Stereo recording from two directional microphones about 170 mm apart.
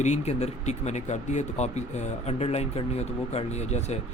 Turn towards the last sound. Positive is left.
turn(degrees=40)  # may be behind; listen again after turning